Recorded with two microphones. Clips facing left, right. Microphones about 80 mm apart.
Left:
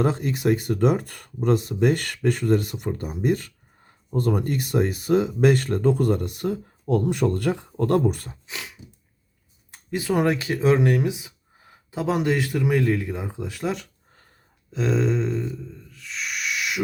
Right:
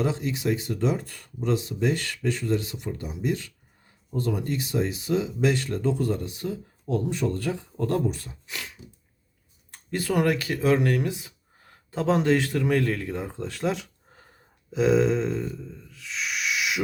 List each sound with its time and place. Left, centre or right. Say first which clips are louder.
0.0 s speech: left 4 dB; left
8.4 s a sound: left 1 dB; centre
9.7 s speech: left 2 dB; centre